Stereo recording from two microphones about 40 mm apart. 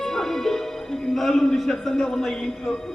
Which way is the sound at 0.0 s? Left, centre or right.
Centre.